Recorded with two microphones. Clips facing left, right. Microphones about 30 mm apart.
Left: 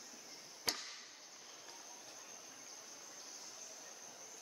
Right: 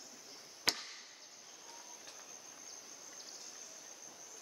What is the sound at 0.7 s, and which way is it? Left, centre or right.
Chop, right.